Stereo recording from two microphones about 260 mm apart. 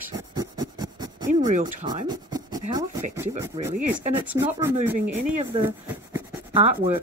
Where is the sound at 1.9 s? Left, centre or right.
Centre.